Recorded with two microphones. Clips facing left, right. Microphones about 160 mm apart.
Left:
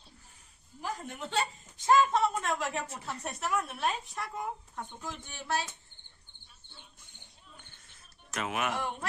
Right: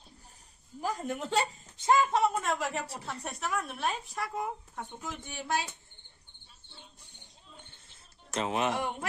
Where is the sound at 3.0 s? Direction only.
Centre (ahead or behind).